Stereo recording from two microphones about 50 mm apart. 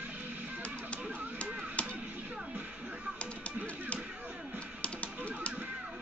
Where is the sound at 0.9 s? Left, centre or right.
Left.